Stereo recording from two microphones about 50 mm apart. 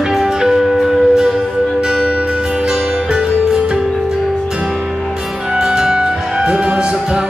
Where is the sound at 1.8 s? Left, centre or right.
Centre.